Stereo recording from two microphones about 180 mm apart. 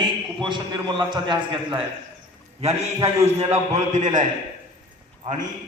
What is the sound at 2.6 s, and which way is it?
A man's voice, 35° right (ahead or behind).